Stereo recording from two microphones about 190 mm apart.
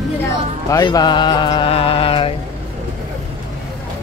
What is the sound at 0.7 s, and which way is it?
Music, 20° left (ahead or behind).